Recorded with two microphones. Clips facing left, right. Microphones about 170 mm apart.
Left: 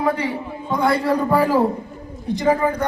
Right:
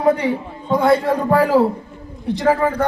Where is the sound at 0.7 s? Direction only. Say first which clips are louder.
Right 5 dB; 25° right (ahead or behind).